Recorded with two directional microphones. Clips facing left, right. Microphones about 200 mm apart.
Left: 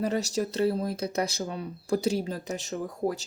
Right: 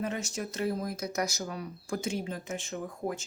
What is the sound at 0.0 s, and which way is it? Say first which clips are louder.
Speech: left 6 dB; 35° left (ahead or behind).